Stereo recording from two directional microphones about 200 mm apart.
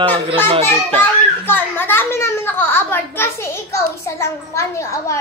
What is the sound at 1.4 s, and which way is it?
A child's voice, 10° left (ahead or behind).